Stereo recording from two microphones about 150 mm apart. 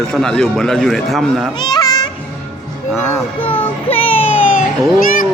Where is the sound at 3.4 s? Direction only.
35° left (ahead or behind).